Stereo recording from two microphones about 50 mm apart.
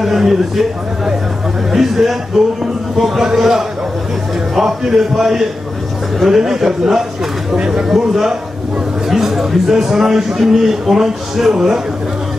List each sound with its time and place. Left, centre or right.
0.0 s a man's voice: centre